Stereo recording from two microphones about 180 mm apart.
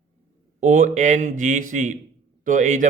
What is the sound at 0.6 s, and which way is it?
Speech, 40° right (ahead or behind).